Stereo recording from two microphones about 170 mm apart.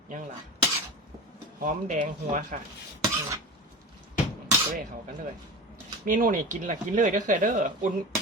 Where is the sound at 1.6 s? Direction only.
50° right (ahead or behind).